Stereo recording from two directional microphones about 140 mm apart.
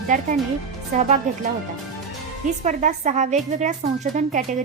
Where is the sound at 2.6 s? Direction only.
60° right (ahead or behind).